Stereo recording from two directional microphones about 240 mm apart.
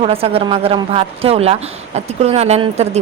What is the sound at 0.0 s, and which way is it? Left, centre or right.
A woman's voice, right.